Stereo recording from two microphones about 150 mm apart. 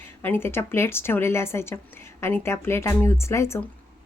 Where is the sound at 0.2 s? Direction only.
15° left (ahead or behind).